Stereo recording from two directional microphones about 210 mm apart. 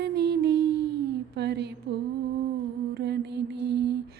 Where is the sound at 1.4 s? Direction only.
55° right (ahead or behind).